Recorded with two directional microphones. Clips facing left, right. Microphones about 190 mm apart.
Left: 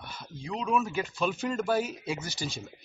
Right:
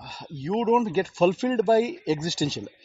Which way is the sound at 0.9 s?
40° right (ahead or behind).